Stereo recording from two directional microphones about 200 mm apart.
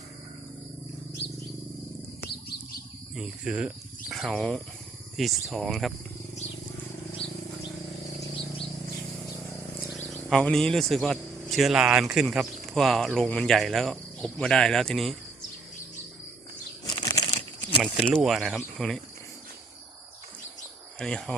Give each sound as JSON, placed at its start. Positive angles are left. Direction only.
{"t": 3.2, "sound": "speech", "side_deg": -5}
{"t": 7.2, "sound": "bird", "side_deg": 60}
{"t": 9.9, "sound": "speech", "side_deg": 0}
{"t": 16.8, "sound": "crumpling", "side_deg": 25}
{"t": 18.0, "sound": "speech", "side_deg": 0}
{"t": 21.0, "sound": "speech", "side_deg": 5}